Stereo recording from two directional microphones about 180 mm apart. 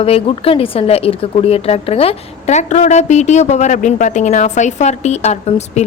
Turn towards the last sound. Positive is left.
turn(degrees=40)  # may be behind; listen again after turning